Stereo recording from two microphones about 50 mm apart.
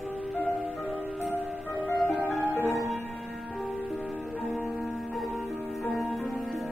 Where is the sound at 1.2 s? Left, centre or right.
Left.